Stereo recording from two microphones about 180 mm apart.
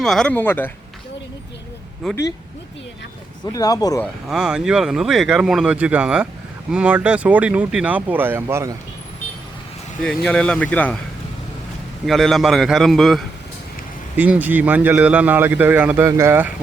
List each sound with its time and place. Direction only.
0.0 s speech: centre (ahead or behind)
2.0 s speech: centre (ahead or behind)
3.4 s speech: 20° left (ahead or behind)
4.0 s a man's voice: 5° right (ahead or behind)
10.0 s speech: 5° left (ahead or behind)
12.0 s speech: centre (ahead or behind)
14.2 s a man's voice: 10° right (ahead or behind)